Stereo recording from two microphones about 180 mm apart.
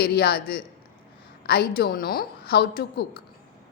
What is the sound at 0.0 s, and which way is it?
A woman's voice, 60° left (ahead or behind).